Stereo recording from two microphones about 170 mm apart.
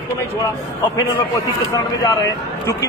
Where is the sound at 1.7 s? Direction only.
20° left (ahead or behind).